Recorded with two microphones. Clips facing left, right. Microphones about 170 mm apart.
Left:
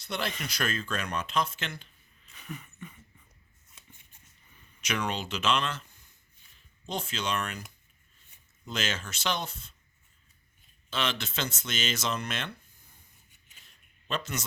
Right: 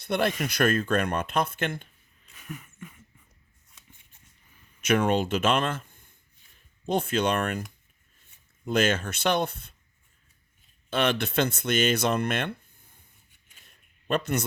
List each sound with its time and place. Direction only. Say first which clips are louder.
0.0 s speech: right 8 dB; 55° right (ahead or behind)
2.3 s a sound: right 1 dB; 5° right (ahead or behind)
4.8 s speech: right 9 dB; 50° right (ahead or behind)
8.6 s speech: right 10 dB; 55° right (ahead or behind)
10.8 s speech: right 7 dB; 55° right (ahead or behind)
13.7 s a sound: right 7 dB; 55° right (ahead or behind)